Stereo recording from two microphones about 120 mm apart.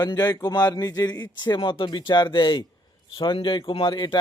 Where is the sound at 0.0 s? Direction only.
35° left (ahead or behind).